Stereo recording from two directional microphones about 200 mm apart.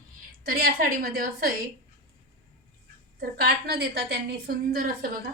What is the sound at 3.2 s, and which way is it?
A woman's voice, 50° right (ahead or behind).